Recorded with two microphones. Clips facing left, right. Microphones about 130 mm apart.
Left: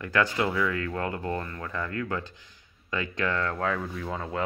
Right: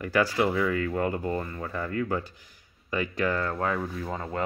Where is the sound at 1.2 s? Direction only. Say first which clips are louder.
Right 2 dB; 10° right (ahead or behind).